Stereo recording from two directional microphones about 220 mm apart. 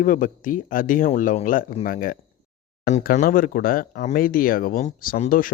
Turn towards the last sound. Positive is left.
turn(degrees=40)  # may be behind; listen again after turning